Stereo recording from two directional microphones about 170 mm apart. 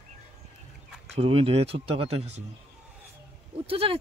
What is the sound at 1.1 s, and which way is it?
Speech, 35° right (ahead or behind).